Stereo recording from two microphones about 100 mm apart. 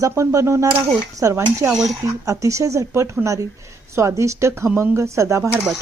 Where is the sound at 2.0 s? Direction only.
30° right (ahead or behind).